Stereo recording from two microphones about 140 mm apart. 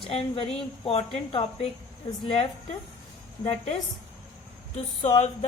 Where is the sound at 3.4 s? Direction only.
45° left (ahead or behind).